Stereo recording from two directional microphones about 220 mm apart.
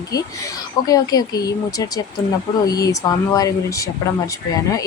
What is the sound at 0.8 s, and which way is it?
A woman's voice, 15° left (ahead or behind).